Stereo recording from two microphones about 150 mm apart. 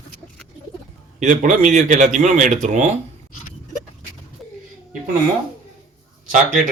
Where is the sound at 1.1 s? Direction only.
55° right (ahead or behind).